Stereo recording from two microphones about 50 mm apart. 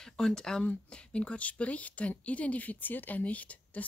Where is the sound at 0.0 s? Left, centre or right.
Centre.